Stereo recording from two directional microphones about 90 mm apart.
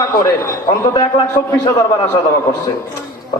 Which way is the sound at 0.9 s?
65° left (ahead or behind).